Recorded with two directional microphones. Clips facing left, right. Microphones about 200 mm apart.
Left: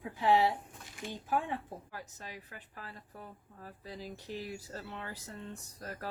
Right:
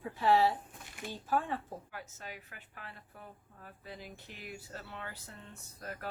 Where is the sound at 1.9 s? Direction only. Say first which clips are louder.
Even; 35° left (ahead or behind).